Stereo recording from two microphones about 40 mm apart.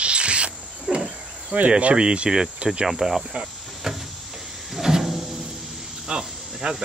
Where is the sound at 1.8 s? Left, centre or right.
Right.